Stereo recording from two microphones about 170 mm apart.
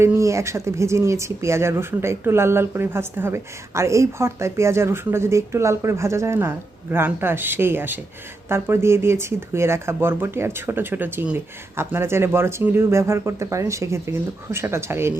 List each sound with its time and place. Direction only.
0.0 s speech: 15° right (ahead or behind)